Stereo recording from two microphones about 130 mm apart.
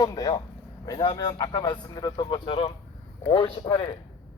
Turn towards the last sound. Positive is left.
turn(degrees=35)  # may be behind; listen again after turning